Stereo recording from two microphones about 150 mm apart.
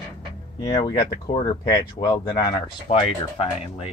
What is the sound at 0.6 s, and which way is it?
Speech, 30° left (ahead or behind).